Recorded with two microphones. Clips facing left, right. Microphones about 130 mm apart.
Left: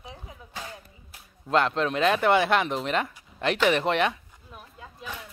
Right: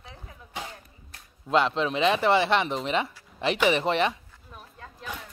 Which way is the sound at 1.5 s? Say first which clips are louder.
Even; centre (ahead or behind).